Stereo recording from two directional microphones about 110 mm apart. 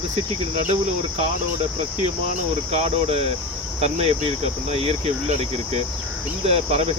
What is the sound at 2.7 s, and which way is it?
Speech, 65° right (ahead or behind).